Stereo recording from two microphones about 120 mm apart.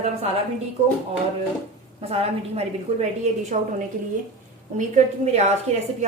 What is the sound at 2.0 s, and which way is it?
A woman's voice, 60° right (ahead or behind).